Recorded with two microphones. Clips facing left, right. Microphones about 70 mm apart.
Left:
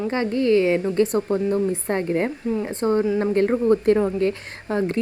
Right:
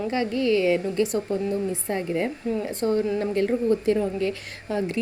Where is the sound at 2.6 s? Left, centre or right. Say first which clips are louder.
Left 3 dB; left.